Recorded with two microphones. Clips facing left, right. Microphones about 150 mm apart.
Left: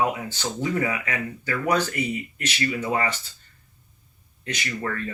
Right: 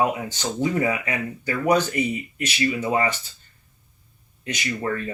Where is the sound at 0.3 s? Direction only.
20° right (ahead or behind).